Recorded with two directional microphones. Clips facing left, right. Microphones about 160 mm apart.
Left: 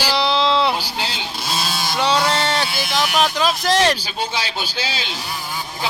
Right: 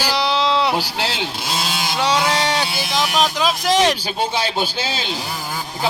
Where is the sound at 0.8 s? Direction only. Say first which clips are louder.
Right 4 dB; 75° right (ahead or behind).